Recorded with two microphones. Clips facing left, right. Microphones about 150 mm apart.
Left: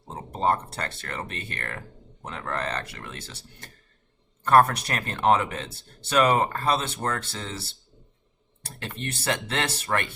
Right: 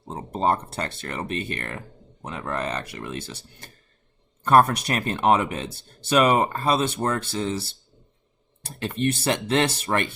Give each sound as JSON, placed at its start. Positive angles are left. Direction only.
{"t": 0.3, "sound": "speech", "side_deg": -20}
{"t": 8.6, "sound": "speech", "side_deg": -20}